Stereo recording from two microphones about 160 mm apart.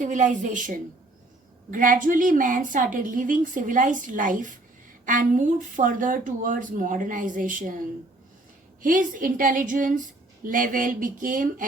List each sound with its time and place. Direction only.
0.0 s a woman's voice: 50° right (ahead or behind)
8.8 s a woman's voice: 55° right (ahead or behind)